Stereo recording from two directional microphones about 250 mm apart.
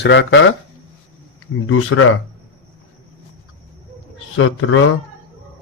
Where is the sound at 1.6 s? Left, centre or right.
Left.